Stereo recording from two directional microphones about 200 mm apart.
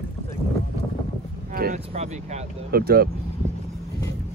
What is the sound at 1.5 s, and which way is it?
Speech, 45° right (ahead or behind).